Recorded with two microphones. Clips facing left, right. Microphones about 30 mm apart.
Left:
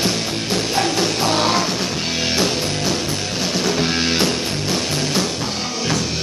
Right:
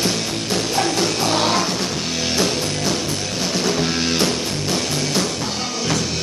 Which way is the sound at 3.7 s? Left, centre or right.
Centre.